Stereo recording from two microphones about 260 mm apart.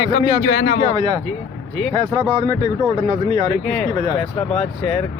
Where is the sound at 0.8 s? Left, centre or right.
Centre.